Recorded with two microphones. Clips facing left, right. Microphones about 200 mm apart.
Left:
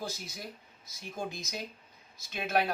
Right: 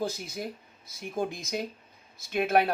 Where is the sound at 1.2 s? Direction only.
55° right (ahead or behind).